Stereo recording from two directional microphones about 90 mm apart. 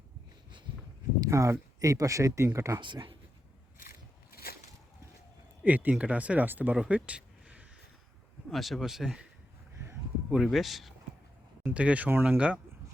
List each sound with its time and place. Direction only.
0.7 s a sound: 60° right (ahead or behind)
1.2 s speech: 35° right (ahead or behind)
2.8 s speech: 65° right (ahead or behind)
5.6 s speech: 20° right (ahead or behind)
8.4 s speech: centre (ahead or behind)
10.3 s speech: centre (ahead or behind)
11.7 s speech: 15° right (ahead or behind)